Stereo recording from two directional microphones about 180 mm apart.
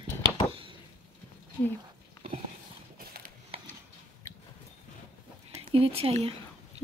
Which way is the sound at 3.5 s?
30° right (ahead or behind).